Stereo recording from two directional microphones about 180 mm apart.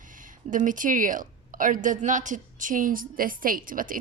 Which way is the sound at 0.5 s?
45° right (ahead or behind).